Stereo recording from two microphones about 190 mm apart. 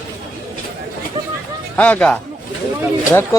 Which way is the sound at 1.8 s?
5° left (ahead or behind).